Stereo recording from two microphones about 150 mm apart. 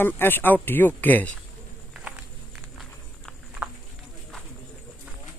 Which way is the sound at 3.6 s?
10° right (ahead or behind).